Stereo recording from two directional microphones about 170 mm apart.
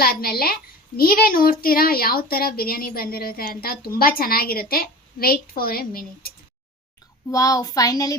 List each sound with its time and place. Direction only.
0.0 s a child's voice: 65° left (ahead or behind)
7.3 s a woman's voice: 20° left (ahead or behind)